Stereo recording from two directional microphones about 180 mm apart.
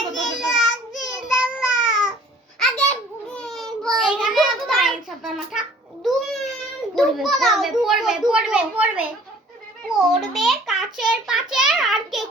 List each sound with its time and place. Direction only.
0.1 s child singing: centre (ahead or behind)
2.6 s a sound: 5° left (ahead or behind)
6.9 s a child's voice: centre (ahead or behind)